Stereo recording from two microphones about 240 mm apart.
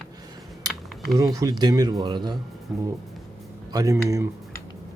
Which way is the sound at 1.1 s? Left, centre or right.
Centre.